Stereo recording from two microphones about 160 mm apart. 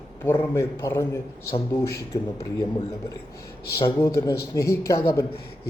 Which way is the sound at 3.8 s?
25° left (ahead or behind).